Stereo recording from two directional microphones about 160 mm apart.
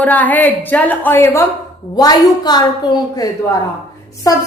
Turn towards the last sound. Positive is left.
turn(degrees=20)  # may be behind; listen again after turning